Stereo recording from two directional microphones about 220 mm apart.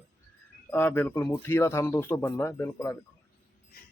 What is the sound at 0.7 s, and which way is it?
Speech, 10° left (ahead or behind).